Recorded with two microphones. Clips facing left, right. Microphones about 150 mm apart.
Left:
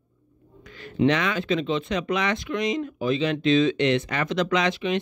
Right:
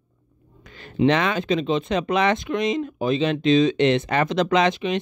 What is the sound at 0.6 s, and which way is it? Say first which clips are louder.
Speech: right 2 dB; 25° right (ahead or behind).